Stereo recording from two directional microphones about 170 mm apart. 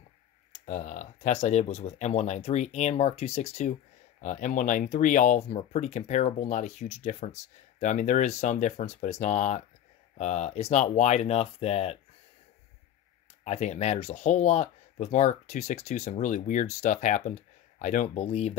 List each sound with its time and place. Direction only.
0.5 s speech: 45° left (ahead or behind)
13.4 s speech: 40° left (ahead or behind)